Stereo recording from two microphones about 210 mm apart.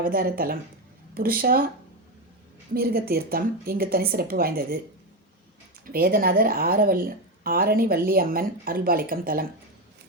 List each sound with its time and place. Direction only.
0.0 s speech: 45° right (ahead or behind)
2.7 s speech: 45° right (ahead or behind)
5.8 s speech: 45° right (ahead or behind)